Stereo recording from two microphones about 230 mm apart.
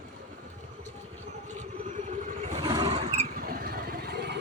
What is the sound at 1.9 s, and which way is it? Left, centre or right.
Vehicle, right.